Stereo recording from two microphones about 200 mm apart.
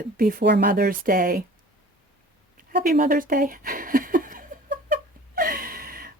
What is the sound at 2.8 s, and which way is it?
Speech, 45° right (ahead or behind).